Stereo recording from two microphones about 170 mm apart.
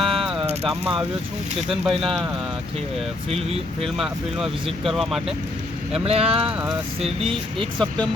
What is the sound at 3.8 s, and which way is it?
Speech, centre (ahead or behind).